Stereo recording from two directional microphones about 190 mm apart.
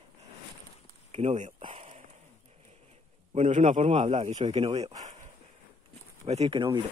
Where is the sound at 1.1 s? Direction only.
35° right (ahead or behind).